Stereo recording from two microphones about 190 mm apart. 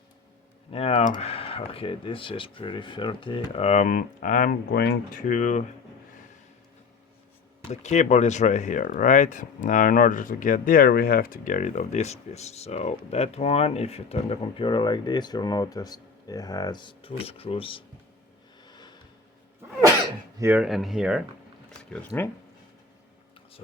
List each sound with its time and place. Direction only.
0.7 s speech: 30° left (ahead or behind)
7.7 s speech: 35° left (ahead or behind)
18.6 s a sound: 20° left (ahead or behind)
20.4 s speech: 10° right (ahead or behind); by 22.3 s 10° left (ahead or behind)